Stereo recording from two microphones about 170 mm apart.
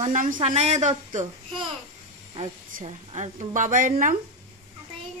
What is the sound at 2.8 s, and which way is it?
Speech, 40° right (ahead or behind).